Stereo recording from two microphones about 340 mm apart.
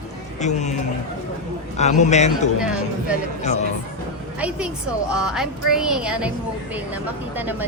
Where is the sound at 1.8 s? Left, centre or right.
Centre.